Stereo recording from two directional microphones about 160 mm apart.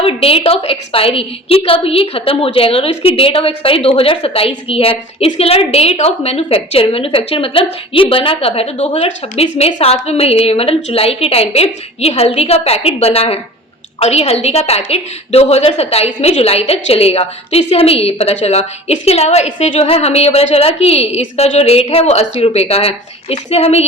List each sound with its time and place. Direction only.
0.0 s a woman's voice: 35° left (ahead or behind)